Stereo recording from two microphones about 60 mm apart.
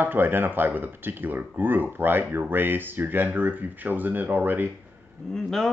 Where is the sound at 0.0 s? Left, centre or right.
Right.